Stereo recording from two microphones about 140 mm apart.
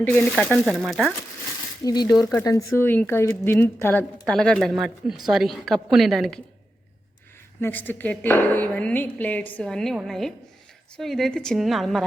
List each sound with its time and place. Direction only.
0.0 s a woman's voice: 15° left (ahead or behind)
1.8 s a woman's voice: 30° left (ahead or behind)
4.3 s a woman's voice: 5° left (ahead or behind)
7.6 s a woman's voice: 15° left (ahead or behind)